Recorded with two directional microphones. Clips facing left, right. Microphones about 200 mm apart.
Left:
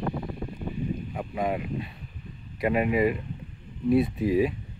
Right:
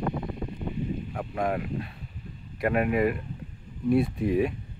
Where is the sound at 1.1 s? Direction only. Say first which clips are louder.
Even; 5° left (ahead or behind).